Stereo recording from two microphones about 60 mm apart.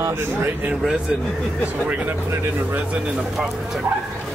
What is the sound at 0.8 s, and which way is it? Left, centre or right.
Speech, centre.